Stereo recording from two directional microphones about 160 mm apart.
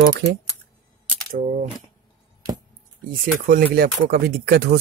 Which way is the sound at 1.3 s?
55° right (ahead or behind).